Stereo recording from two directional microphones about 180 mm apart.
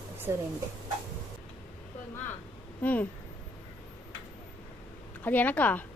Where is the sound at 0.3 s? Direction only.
15° right (ahead or behind).